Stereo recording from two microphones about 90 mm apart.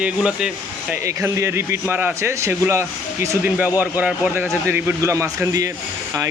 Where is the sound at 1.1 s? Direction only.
30° right (ahead or behind).